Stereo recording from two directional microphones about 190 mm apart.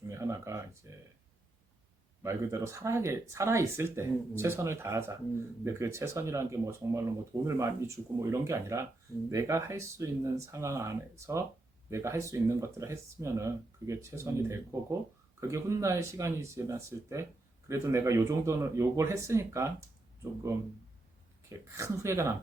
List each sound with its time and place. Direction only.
0.1 s speech: 15° right (ahead or behind)
2.2 s speech: 15° right (ahead or behind)
21.5 s speech: 15° right (ahead or behind)